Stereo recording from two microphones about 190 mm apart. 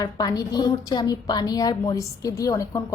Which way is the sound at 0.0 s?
20° left (ahead or behind).